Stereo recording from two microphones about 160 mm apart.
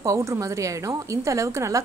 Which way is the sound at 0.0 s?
20° right (ahead or behind).